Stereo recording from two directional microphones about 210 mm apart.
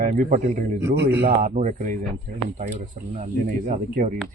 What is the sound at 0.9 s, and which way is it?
Speech, 50° right (ahead or behind).